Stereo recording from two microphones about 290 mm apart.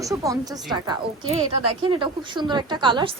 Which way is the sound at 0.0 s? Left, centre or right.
Centre.